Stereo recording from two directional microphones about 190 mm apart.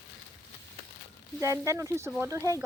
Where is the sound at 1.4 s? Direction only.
15° right (ahead or behind).